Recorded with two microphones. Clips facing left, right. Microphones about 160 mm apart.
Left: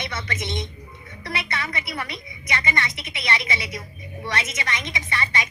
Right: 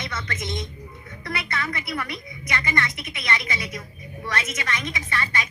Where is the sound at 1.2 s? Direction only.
15° left (ahead or behind).